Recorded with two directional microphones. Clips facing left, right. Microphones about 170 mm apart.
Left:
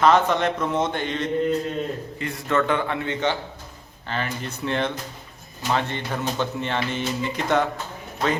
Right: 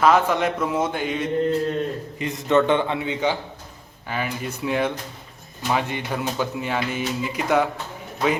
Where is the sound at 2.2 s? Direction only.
20° right (ahead or behind).